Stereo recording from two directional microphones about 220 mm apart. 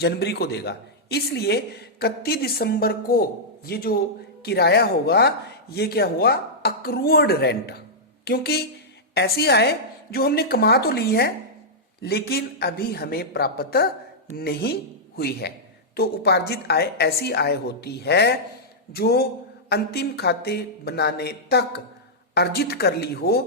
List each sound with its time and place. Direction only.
0.0 s speech: 50° left (ahead or behind)